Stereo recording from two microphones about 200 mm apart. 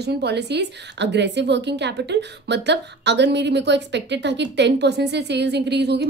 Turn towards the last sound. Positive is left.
turn(degrees=-55)  # may be behind; listen again after turning